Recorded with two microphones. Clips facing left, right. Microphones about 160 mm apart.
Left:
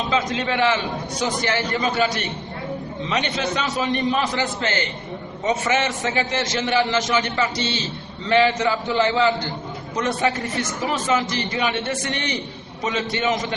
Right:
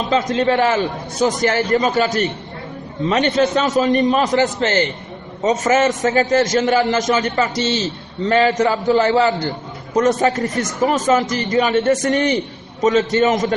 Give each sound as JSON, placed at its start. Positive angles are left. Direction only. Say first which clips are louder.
{"t": 0.1, "sound": "a man's voice", "louder": "right 9 dB", "side_deg": -45}